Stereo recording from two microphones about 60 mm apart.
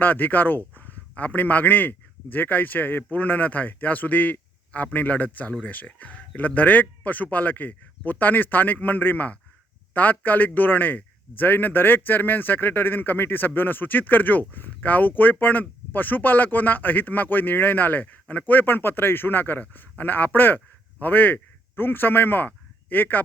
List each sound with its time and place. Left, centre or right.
0.0 s a man's voice: left